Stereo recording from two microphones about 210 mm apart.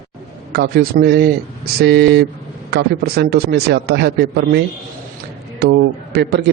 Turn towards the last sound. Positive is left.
turn(degrees=-50)  # may be behind; listen again after turning